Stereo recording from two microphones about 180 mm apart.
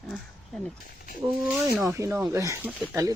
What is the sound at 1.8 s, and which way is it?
Speech, 15° right (ahead or behind).